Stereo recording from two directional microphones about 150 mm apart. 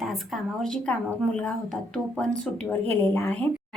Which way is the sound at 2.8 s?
10° left (ahead or behind).